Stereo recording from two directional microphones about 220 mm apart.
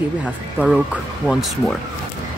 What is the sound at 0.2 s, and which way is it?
Speech, 5° right (ahead or behind).